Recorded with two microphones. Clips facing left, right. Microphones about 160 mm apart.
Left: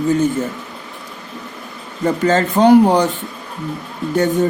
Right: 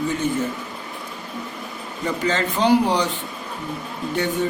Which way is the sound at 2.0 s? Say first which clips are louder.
Left 7 dB; 45° left (ahead or behind).